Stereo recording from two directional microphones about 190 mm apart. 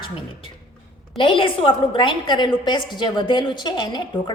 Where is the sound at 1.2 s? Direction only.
25° left (ahead or behind).